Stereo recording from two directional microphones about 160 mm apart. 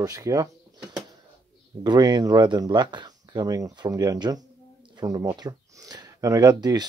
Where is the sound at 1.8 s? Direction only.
25° right (ahead or behind).